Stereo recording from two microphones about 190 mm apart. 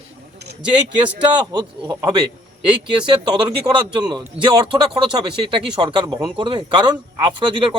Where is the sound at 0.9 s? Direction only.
25° right (ahead or behind).